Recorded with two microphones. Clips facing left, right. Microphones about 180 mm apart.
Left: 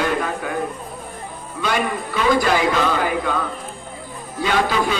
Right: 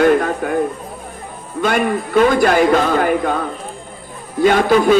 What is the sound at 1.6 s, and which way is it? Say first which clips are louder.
A man's voice: right 5 dB; 50° right (ahead or behind).